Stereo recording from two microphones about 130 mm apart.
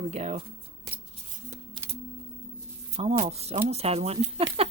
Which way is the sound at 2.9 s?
55° right (ahead or behind).